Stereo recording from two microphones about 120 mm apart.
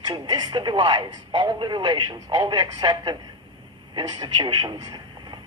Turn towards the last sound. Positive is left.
turn(degrees=-40)  # may be behind; listen again after turning